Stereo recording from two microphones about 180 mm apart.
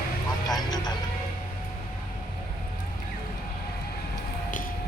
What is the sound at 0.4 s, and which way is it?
Vehicle, 20° left (ahead or behind).